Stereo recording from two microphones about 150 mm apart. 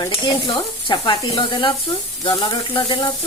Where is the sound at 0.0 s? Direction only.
30° left (ahead or behind).